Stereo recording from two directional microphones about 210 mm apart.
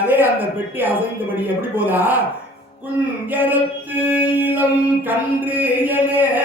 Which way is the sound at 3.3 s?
10° right (ahead or behind).